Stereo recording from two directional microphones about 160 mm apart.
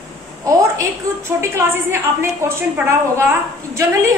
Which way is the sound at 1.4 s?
15° right (ahead or behind).